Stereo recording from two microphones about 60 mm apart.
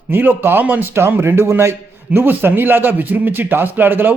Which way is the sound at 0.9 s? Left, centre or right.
Right.